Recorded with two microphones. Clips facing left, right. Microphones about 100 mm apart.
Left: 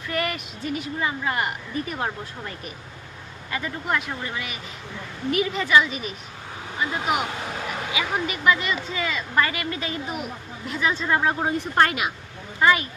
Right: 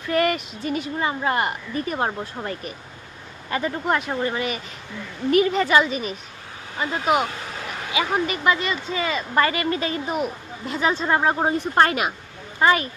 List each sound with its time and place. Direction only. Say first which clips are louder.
0.1 s a woman's voice: right 7 dB; 35° right (ahead or behind)
3.5 s a woman's voice: right 4 dB; 30° right (ahead or behind)
7.9 s a woman's voice: right 6 dB; 35° right (ahead or behind)